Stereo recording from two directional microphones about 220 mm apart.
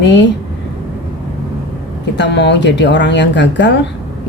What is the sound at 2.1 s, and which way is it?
Speech, 50° left (ahead or behind).